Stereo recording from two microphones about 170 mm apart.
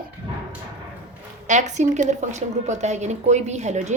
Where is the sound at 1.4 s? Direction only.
45° right (ahead or behind).